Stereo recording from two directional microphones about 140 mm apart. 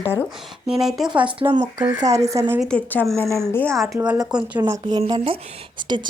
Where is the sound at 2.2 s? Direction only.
25° right (ahead or behind).